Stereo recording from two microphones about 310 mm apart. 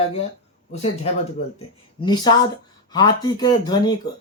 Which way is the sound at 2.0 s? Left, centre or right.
Centre.